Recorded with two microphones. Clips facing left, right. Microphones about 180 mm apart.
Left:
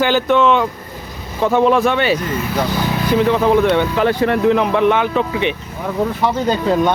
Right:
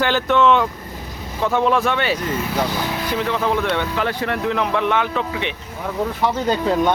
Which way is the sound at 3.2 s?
10° left (ahead or behind).